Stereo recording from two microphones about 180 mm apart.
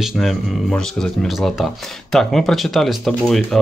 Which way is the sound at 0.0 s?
Centre (ahead or behind).